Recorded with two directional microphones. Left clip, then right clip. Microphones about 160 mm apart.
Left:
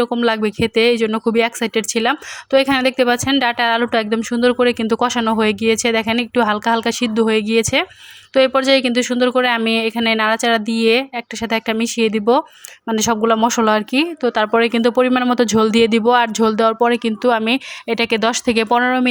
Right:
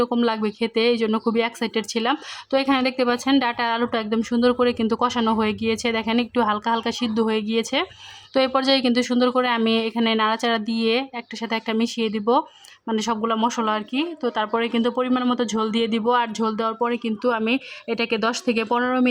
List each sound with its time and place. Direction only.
0.2 s speech: 20° left (ahead or behind)